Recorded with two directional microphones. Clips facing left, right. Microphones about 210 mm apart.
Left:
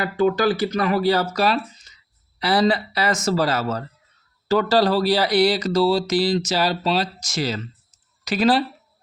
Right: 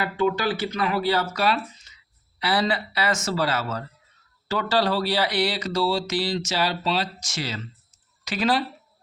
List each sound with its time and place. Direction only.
0.0 s speech: 40° left (ahead or behind)